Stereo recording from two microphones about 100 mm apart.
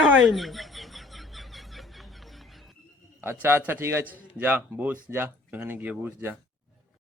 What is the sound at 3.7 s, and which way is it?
Speech, 25° right (ahead or behind).